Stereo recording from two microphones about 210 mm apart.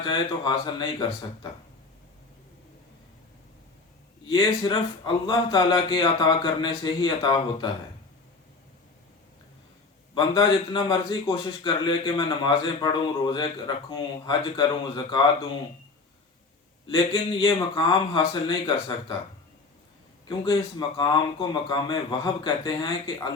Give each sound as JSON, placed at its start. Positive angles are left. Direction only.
{"t": 0.0, "sound": "a man's voice", "side_deg": 20}
{"t": 4.3, "sound": "a man's voice", "side_deg": 25}
{"t": 10.2, "sound": "a man's voice", "side_deg": 20}
{"t": 16.8, "sound": "a man's voice", "side_deg": 20}
{"t": 20.2, "sound": "a man's voice", "side_deg": 20}